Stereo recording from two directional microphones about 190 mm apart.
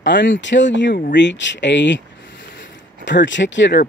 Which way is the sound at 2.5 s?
70° left (ahead or behind).